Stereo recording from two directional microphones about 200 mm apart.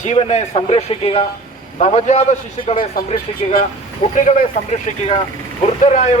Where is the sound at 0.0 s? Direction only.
35° left (ahead or behind).